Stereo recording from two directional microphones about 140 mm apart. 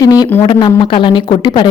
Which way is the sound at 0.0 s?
25° left (ahead or behind).